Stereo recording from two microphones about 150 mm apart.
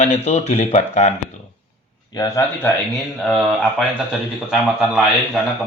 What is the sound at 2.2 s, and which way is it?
Speech, 20° left (ahead or behind).